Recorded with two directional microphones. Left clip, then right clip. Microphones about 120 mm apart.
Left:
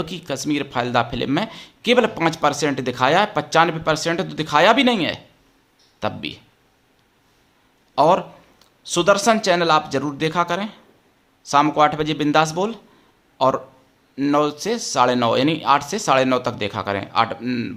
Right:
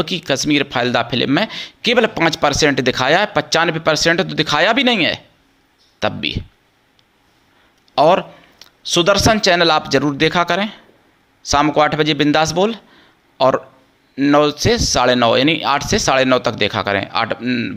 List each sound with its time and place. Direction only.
0.0 s speech: 25° right (ahead or behind)
7.9 s speech: 20° right (ahead or behind)
17.4 s speech: 5° right (ahead or behind)